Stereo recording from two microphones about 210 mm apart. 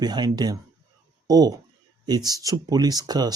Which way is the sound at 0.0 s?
20° right (ahead or behind).